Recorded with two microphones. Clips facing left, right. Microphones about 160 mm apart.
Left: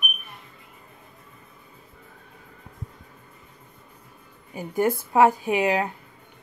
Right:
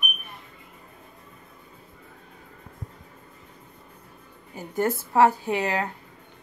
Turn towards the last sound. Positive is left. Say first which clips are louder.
# left 3 dB
turn(degrees=15)  # may be behind; listen again after turning